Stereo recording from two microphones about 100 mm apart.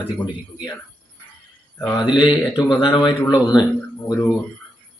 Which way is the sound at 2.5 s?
50° left (ahead or behind).